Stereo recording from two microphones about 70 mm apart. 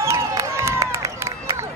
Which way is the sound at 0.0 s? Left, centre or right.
Right.